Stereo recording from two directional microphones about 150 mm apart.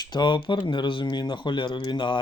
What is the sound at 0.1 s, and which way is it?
Speech, 30° left (ahead or behind).